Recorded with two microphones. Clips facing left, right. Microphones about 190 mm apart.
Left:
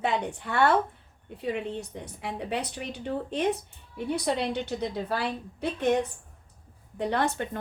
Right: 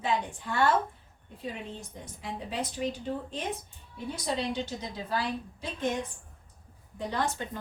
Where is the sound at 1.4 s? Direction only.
65° left (ahead or behind).